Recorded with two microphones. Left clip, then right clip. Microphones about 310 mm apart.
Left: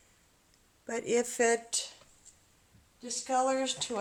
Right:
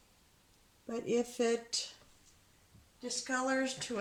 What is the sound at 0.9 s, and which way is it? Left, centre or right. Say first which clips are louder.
Speech: left 4 dB; left.